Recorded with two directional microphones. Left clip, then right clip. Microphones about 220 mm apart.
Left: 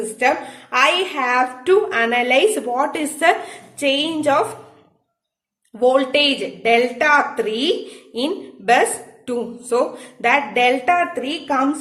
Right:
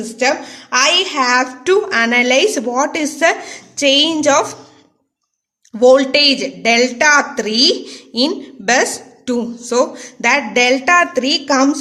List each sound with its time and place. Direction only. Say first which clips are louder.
0.2 s a woman's voice: right 2 dB; 40° right (ahead or behind)
5.8 s a woman's voice: right 6 dB; 40° right (ahead or behind)